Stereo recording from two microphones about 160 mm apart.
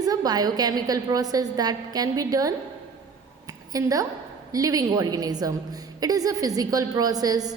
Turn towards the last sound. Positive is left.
turn(degrees=-25)  # may be behind; listen again after turning